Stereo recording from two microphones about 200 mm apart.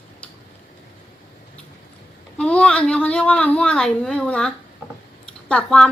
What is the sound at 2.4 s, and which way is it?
A woman's voice, 5° left (ahead or behind).